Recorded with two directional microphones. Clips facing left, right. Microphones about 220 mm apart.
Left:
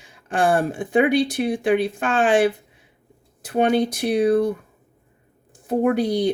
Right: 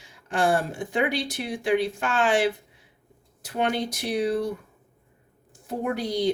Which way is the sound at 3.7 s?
55° left (ahead or behind).